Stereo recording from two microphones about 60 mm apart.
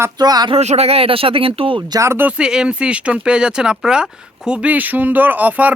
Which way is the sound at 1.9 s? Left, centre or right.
Right.